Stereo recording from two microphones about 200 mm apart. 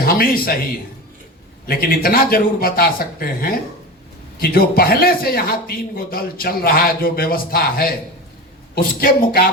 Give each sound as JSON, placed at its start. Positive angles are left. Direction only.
{"t": 0.0, "sound": "speech", "side_deg": 45}
{"t": 1.6, "sound": "a man's voice", "side_deg": 50}